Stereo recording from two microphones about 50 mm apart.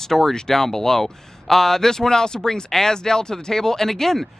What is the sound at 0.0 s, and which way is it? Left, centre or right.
Speech, centre.